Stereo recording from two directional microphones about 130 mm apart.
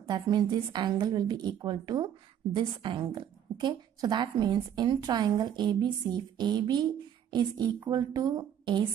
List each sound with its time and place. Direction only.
0.0 s a woman's voice: 35° right (ahead or behind)